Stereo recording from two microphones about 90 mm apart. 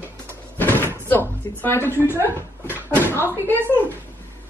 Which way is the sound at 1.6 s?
25° left (ahead or behind).